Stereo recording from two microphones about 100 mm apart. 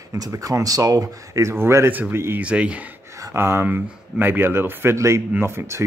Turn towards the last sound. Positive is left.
turn(degrees=-25)  # may be behind; listen again after turning